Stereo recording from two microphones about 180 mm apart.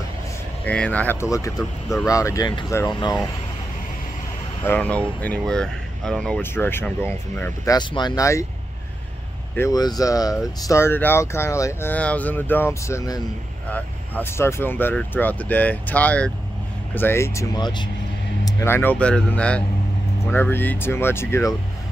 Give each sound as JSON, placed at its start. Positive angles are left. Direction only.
{"t": 0.7, "sound": "speech", "side_deg": 10}
{"t": 4.6, "sound": "speech", "side_deg": 5}
{"t": 7.7, "sound": "speech", "side_deg": 25}
{"t": 9.6, "sound": "speech", "side_deg": 20}